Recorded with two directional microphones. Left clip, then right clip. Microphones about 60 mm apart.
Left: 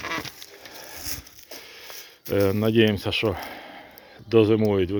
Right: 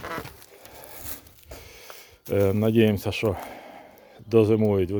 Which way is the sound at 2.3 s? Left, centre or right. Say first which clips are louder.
Left 1 dB; right.